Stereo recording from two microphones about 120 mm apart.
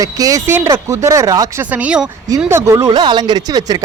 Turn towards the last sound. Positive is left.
turn(degrees=-30)  # may be behind; listen again after turning